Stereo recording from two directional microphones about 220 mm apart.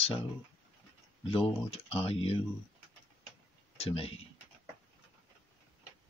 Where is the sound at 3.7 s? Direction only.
25° left (ahead or behind).